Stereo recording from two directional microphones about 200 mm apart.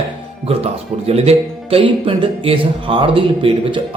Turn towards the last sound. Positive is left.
turn(degrees=-25)  # may be behind; listen again after turning